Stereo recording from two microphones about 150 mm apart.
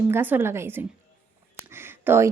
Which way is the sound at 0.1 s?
15° right (ahead or behind).